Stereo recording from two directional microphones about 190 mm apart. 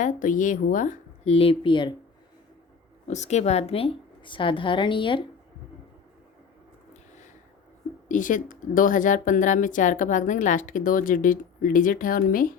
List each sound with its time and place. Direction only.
0.0 s a woman's voice: 45° left (ahead or behind); by 1.9 s 25° left (ahead or behind)
3.1 s a woman's voice: 35° left (ahead or behind)
8.0 s a woman's voice: 45° left (ahead or behind)